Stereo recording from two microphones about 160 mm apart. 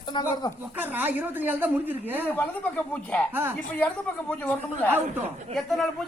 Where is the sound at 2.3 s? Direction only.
10° left (ahead or behind).